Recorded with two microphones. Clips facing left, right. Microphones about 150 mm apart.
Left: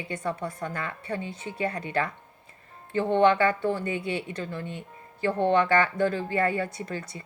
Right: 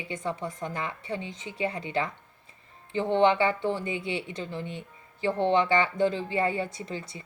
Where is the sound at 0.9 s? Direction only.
20° right (ahead or behind).